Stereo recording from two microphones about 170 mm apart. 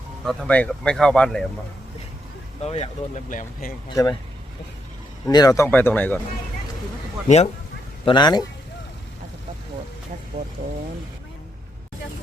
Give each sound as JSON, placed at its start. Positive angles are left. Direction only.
{"t": 0.3, "sound": "speech", "side_deg": 5}
{"t": 2.6, "sound": "speech", "side_deg": 40}
{"t": 3.8, "sound": "speech", "side_deg": 20}
{"t": 5.3, "sound": "speech", "side_deg": 20}
{"t": 7.3, "sound": "speech", "side_deg": 40}
{"t": 8.0, "sound": "speech", "side_deg": 25}
{"t": 10.3, "sound": "speech", "side_deg": -35}